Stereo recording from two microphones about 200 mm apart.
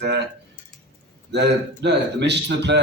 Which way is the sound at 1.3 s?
60° right (ahead or behind).